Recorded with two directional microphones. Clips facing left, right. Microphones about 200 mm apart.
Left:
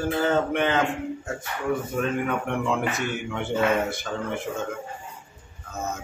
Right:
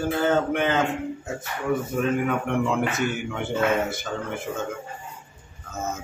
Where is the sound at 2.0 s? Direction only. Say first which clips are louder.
Right 2 dB; centre (ahead or behind).